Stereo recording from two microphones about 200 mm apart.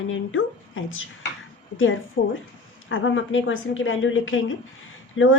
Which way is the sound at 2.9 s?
75° left (ahead or behind).